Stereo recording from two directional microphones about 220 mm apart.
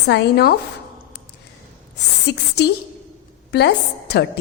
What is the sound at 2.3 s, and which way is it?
A woman's voice, 50° left (ahead or behind).